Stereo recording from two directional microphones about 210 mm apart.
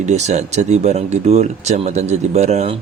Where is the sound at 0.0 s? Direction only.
35° right (ahead or behind).